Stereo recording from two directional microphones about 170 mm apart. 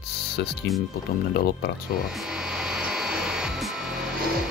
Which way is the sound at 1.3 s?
65° left (ahead or behind).